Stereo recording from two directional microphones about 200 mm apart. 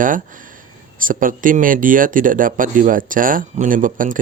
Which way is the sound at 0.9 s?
45° right (ahead or behind).